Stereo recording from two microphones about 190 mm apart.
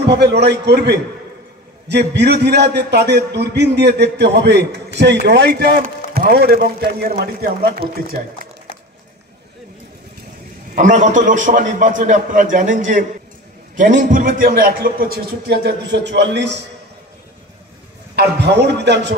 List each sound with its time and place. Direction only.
0.0 s a man's voice: 60° right (ahead or behind)
10.7 s a man's voice: 40° right (ahead or behind); by 16.5 s 65° right (ahead or behind)
18.1 s a man's voice: 60° right (ahead or behind)